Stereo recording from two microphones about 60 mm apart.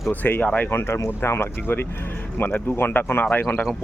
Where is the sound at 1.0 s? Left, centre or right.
Left.